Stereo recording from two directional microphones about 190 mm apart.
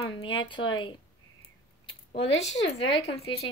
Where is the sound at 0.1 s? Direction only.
25° left (ahead or behind).